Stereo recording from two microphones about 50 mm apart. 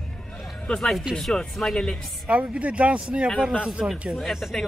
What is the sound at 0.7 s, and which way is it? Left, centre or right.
Speech, centre.